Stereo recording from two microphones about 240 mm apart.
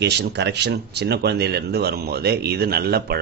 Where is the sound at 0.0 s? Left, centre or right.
Right.